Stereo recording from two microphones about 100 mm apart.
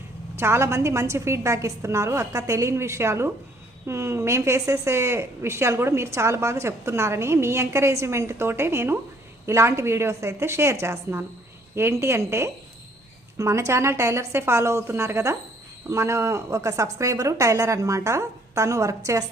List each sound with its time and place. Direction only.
0.3 s a woman's voice: 25° right (ahead or behind)